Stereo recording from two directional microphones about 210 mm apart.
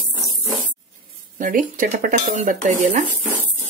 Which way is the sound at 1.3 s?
40° right (ahead or behind).